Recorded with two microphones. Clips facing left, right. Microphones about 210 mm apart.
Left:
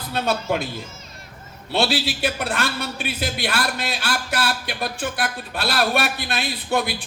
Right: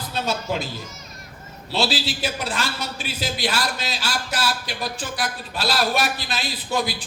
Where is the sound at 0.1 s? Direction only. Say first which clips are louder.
Left 3 dB; 60° left (ahead or behind).